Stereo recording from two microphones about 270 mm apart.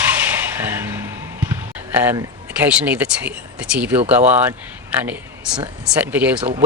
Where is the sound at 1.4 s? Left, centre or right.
Centre.